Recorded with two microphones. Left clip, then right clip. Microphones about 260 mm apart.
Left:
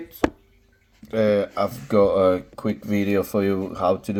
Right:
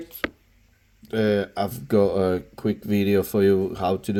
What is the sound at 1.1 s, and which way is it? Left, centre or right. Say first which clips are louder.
Speech: left 3 dB; right.